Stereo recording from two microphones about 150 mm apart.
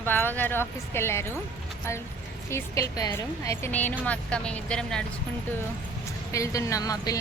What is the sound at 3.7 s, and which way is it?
Speech, 10° left (ahead or behind).